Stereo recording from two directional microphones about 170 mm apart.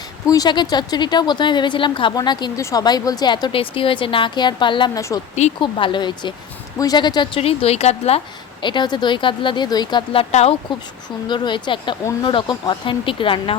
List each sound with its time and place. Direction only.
0.3 s a woman's voice: 20° left (ahead or behind); by 8.2 s 40° left (ahead or behind)
8.6 s a woman's voice: 25° left (ahead or behind)